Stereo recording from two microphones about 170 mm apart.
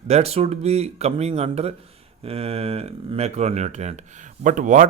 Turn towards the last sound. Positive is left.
turn(degrees=-50)  # may be behind; listen again after turning